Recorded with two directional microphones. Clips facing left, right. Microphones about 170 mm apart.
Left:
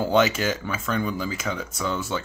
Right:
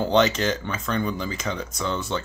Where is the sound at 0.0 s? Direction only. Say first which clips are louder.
Right 1 dB; 5° left (ahead or behind).